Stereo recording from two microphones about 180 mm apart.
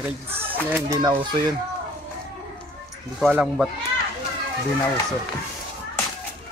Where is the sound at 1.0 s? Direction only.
25° right (ahead or behind).